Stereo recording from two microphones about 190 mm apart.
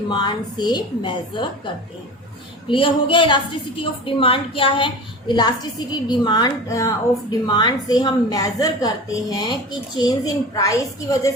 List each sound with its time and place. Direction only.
0.1 s a woman's voice: 25° left (ahead or behind)